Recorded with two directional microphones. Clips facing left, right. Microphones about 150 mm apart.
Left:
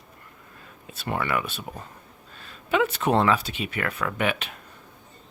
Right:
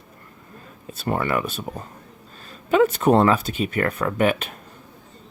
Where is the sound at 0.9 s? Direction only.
40° right (ahead or behind).